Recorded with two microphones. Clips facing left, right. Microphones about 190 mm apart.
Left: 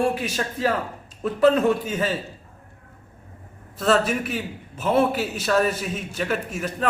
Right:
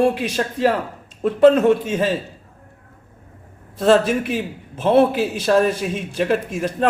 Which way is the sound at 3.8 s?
30° right (ahead or behind).